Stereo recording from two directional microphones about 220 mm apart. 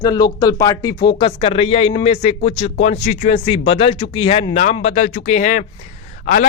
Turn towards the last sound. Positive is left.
turn(degrees=35)  # may be behind; listen again after turning